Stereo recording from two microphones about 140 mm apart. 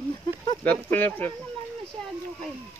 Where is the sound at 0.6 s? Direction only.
10° left (ahead or behind).